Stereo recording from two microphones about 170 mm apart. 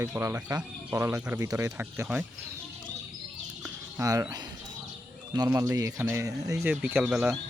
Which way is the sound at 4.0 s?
20° right (ahead or behind).